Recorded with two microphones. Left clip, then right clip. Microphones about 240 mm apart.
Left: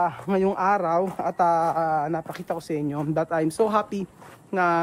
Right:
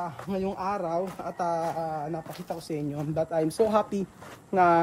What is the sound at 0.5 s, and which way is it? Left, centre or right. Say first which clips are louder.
Speech: left 6 dB; left.